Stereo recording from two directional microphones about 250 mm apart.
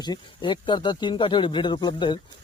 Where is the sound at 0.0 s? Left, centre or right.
Centre.